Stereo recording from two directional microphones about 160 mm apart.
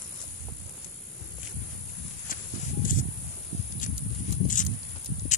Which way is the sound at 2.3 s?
60° left (ahead or behind).